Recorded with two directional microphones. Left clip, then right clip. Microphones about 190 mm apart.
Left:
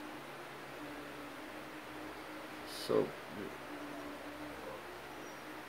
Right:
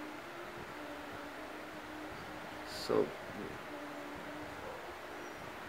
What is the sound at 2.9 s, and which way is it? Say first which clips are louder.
Speech: even; 20° right (ahead or behind).